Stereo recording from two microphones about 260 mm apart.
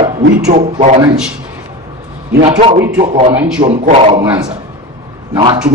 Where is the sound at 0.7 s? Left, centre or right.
Right.